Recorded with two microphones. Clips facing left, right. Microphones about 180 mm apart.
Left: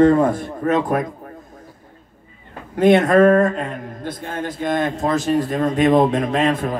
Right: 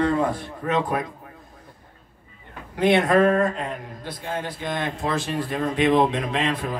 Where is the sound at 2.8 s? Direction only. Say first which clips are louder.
Left 5 dB; 45° left (ahead or behind).